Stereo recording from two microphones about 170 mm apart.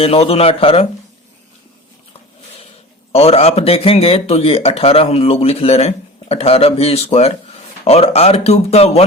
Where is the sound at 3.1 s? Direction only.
35° left (ahead or behind).